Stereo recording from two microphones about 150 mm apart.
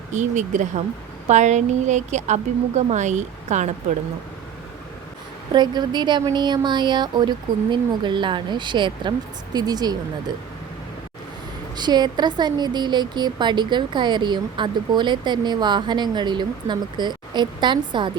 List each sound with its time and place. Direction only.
0.1 s a woman's voice: 55° right (ahead or behind)
5.5 s a woman's voice: 30° right (ahead or behind)
11.8 s a woman's voice: 30° right (ahead or behind)